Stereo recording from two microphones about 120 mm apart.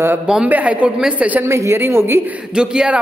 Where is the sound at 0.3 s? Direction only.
10° right (ahead or behind).